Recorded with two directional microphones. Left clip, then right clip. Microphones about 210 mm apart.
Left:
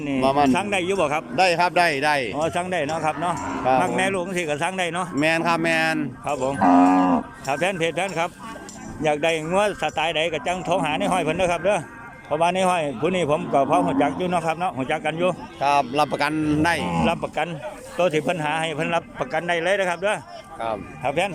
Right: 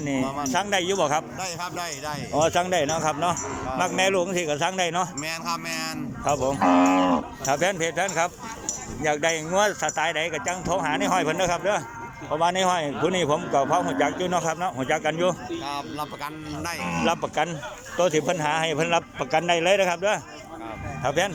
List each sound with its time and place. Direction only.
0.2 s speech: 50° left (ahead or behind)
0.5 s a man's voice: 5° left (ahead or behind)
1.4 s speech: 50° left (ahead or behind)
2.3 s a man's voice: centre (ahead or behind)
5.2 s speech: 40° left (ahead or behind)
6.2 s a man's voice: centre (ahead or behind)
15.6 s speech: 55° left (ahead or behind)
16.8 s speech: 20° left (ahead or behind)
17.1 s a man's voice: 5° left (ahead or behind)